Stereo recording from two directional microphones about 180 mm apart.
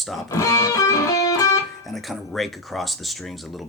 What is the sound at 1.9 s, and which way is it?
Speech, centre (ahead or behind).